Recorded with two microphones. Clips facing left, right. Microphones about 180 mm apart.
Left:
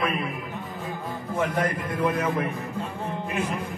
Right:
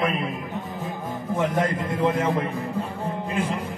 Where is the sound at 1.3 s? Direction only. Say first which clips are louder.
Right 2 dB; 25° right (ahead or behind).